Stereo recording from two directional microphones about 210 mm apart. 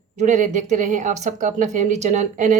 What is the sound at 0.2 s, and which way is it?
Speech, 35° right (ahead or behind).